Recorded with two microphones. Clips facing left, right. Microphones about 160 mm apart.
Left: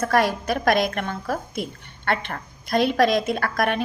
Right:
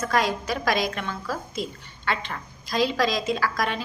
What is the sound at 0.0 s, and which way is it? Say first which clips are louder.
A woman's voice: left 4 dB; 60° left (ahead or behind).